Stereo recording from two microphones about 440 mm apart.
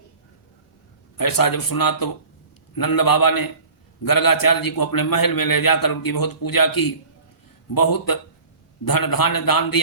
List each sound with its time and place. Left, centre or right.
1.1 s a man's voice: left